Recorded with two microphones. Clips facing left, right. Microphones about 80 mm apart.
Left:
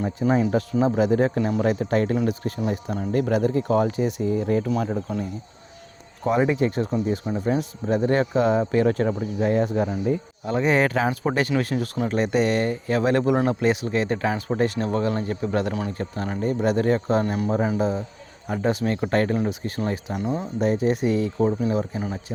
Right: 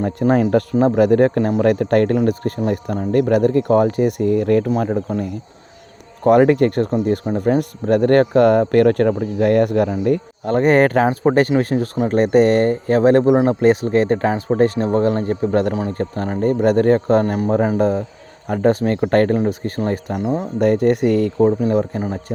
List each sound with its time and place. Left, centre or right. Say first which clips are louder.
0.0 s speech: right 5 dB; right
4.7 s speech: right 6 dB; right
10.0 s speech: right 6 dB; right
10.5 s speech: right 7 dB; right
21.4 s speech: right 7 dB; right